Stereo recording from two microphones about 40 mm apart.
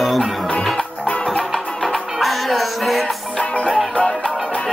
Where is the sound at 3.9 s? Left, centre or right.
Left.